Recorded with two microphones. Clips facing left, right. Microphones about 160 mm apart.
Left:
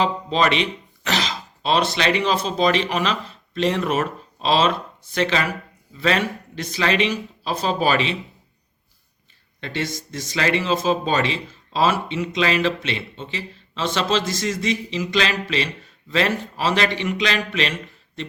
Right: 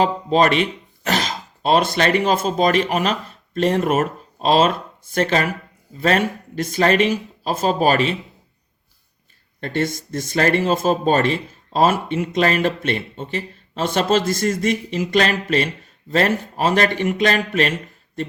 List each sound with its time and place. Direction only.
0.0 s speech: 45° right (ahead or behind)
9.6 s speech: 50° right (ahead or behind)